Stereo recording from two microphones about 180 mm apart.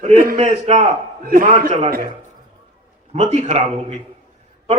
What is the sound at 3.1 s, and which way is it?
Speech, 40° right (ahead or behind).